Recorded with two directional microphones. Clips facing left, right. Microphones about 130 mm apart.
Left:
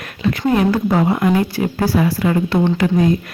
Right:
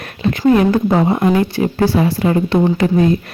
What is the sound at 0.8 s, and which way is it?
Speech, 25° right (ahead or behind).